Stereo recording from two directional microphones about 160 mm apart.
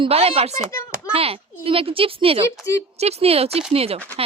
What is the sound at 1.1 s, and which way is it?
A woman's voice, 35° right (ahead or behind).